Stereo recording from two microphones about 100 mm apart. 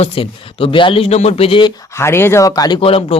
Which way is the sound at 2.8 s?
65° left (ahead or behind).